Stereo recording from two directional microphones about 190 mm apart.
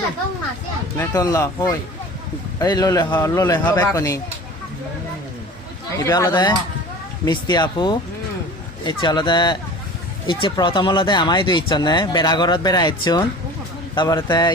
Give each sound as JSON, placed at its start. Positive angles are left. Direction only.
{"t": 0.9, "sound": "speech", "side_deg": 20}
{"t": 6.1, "sound": "a man's voice", "side_deg": 20}